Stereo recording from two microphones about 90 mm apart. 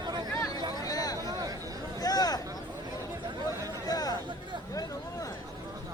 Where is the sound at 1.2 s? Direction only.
40° right (ahead or behind).